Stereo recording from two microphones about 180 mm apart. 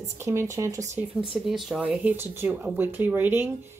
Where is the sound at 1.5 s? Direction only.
Centre (ahead or behind).